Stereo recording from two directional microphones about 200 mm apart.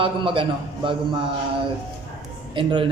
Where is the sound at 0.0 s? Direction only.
25° right (ahead or behind).